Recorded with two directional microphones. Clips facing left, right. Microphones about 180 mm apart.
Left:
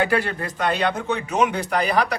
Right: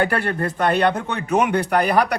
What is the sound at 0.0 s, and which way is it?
A man's voice, 55° right (ahead or behind).